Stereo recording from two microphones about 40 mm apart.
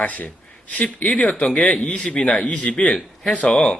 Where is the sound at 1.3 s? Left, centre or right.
Centre; by 2.9 s left.